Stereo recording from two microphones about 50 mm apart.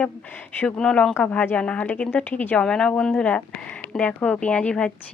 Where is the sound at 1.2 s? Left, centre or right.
Left.